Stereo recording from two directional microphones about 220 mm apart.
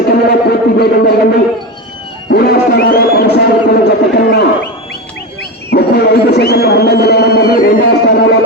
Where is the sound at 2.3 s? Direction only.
45° left (ahead or behind).